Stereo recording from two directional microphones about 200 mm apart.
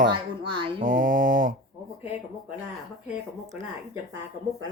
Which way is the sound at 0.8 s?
40° right (ahead or behind).